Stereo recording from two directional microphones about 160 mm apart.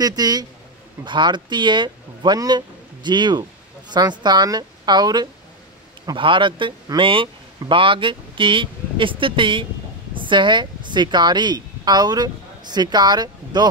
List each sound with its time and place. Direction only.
0.0 s a woman's voice: 25° right (ahead or behind)